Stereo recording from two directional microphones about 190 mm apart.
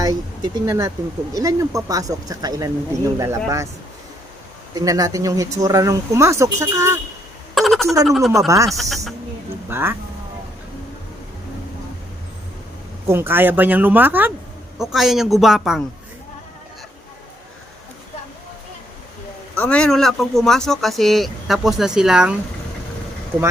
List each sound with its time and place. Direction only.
0.0 s speech: 20° right (ahead or behind)
4.7 s speech: 20° right (ahead or behind)
7.5 s a sound: centre (ahead or behind)
8.0 s speech: centre (ahead or behind)
8.3 s speech: 15° right (ahead or behind)
13.1 s speech: 10° right (ahead or behind)
19.5 s speech: 5° left (ahead or behind)